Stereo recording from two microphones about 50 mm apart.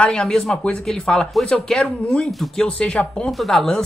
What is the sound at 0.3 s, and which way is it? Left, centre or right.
Speech, centre.